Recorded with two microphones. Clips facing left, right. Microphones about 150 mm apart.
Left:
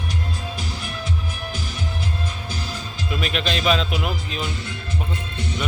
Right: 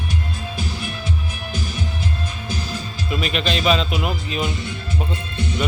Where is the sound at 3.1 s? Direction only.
Centre (ahead or behind).